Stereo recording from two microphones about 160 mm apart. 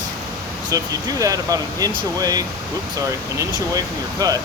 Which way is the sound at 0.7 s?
20° right (ahead or behind).